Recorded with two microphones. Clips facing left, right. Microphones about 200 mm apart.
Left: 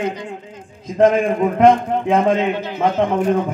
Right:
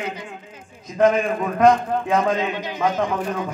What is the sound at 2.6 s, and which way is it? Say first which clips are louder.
Speech: left 3 dB; 15° right (ahead or behind).